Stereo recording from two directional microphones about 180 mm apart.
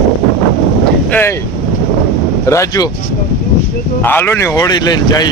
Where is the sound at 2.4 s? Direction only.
15° left (ahead or behind).